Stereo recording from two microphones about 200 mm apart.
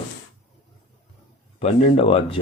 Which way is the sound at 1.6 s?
30° left (ahead or behind).